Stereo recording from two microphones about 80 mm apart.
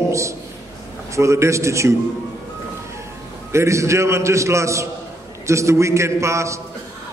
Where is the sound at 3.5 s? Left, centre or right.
Right.